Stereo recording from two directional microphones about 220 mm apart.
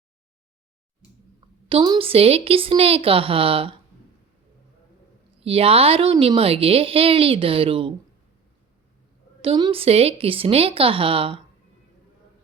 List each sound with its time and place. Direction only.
1.7 s a woman's voice: 20° right (ahead or behind)
5.4 s a woman's voice: 25° right (ahead or behind)
9.4 s a woman's voice: 25° right (ahead or behind)